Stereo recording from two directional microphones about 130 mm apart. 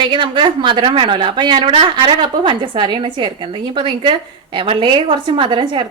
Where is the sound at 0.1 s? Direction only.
40° right (ahead or behind).